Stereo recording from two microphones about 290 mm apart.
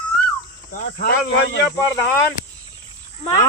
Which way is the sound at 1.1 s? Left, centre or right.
Left.